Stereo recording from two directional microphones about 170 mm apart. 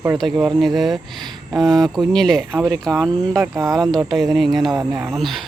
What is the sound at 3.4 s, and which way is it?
Speech, 20° right (ahead or behind).